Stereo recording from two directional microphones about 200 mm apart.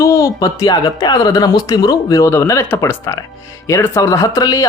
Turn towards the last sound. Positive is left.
turn(degrees=20)  # may be behind; listen again after turning